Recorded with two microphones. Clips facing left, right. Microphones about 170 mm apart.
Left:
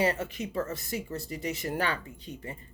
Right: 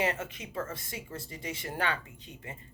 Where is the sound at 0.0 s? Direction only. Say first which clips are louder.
Left 4 dB; 35° left (ahead or behind).